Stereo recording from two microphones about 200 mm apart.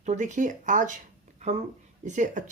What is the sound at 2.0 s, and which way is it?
Speech, 40° right (ahead or behind).